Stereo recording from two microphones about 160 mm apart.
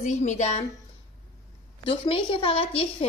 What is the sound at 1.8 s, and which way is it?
A woman's voice, 35° left (ahead or behind).